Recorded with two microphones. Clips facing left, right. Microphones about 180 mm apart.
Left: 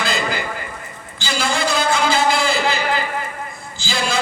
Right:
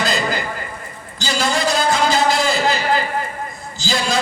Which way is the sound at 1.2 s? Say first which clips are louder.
Right 2 dB; 40° right (ahead or behind).